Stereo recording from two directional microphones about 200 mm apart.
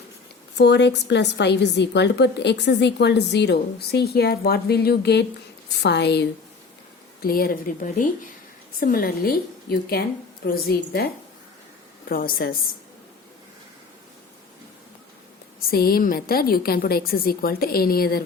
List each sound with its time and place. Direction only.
0.5 s a woman's voice: 55° left (ahead or behind)
7.2 s a woman's voice: 45° left (ahead or behind)
15.7 s a woman's voice: 50° left (ahead or behind)